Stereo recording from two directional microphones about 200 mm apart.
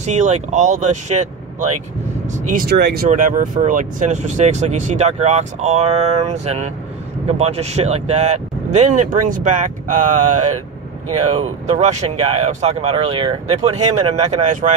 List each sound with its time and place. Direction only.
0.0 s speech: 35° right (ahead or behind)
2.7 s speech: 55° right (ahead or behind)
3.1 s speech: 40° right (ahead or behind)
11.8 s speech: 35° right (ahead or behind)